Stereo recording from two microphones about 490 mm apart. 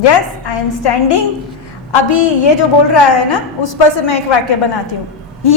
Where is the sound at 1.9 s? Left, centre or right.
Left.